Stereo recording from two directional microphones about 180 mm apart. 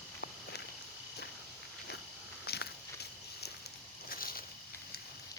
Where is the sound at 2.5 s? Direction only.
60° left (ahead or behind).